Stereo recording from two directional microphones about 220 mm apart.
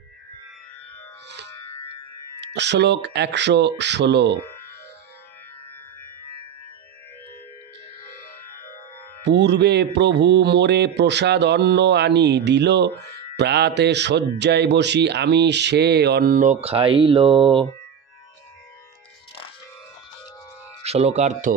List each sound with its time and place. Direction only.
2.4 s a man's voice: 50° right (ahead or behind)
9.2 s a man's voice: 50° right (ahead or behind); by 17.6 s 25° right (ahead or behind)
20.8 s speech: 30° right (ahead or behind)